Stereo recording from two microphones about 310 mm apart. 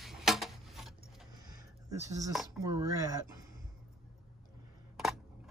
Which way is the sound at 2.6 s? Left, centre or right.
Centre.